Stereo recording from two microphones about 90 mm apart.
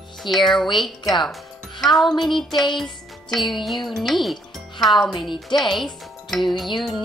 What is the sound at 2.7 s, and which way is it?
Music, centre (ahead or behind).